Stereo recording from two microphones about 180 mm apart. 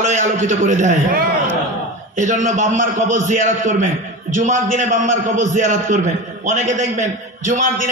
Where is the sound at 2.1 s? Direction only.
45° right (ahead or behind).